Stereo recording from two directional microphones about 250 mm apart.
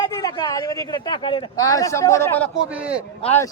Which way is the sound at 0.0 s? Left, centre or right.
Centre.